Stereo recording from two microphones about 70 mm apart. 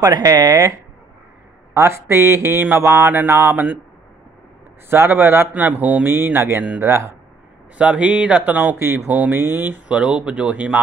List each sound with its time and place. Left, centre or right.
0.0 s speech: right
1.7 s speech: right
4.8 s speech: right
6.0 s speech: right
7.7 s speech: centre
8.7 s speech: right
9.8 s speech: centre